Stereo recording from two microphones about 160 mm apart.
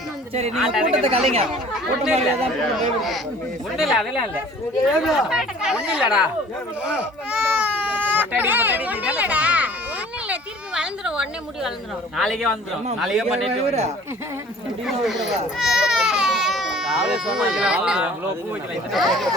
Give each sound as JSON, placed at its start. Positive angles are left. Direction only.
{"t": 0.5, "sound": "speech", "side_deg": 0}
{"t": 0.9, "sound": "speech", "side_deg": -40}
{"t": 3.8, "sound": "speech", "side_deg": 0}
{"t": 10.8, "sound": "a sound", "side_deg": -5}
{"t": 12.1, "sound": "speech", "side_deg": 0}
{"t": 13.2, "sound": "speech", "side_deg": -40}
{"t": 14.8, "sound": "speech", "side_deg": 0}